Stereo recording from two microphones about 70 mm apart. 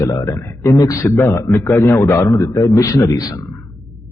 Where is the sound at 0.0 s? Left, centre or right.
Left.